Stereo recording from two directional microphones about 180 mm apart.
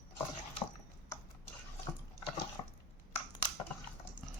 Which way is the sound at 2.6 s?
25° left (ahead or behind).